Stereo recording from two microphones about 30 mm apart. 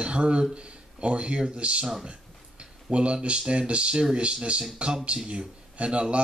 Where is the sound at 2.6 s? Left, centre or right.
Right.